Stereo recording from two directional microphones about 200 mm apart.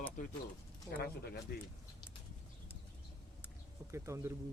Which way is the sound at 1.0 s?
50° left (ahead or behind).